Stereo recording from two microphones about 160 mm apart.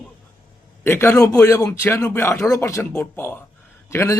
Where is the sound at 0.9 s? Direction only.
15° left (ahead or behind).